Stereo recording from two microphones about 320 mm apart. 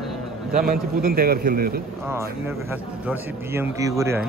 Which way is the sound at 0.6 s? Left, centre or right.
Right.